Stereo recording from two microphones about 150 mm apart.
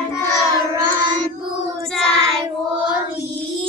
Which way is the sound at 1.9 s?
5° left (ahead or behind).